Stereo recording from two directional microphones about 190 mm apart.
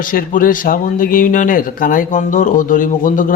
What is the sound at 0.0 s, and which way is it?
Speech, 45° left (ahead or behind).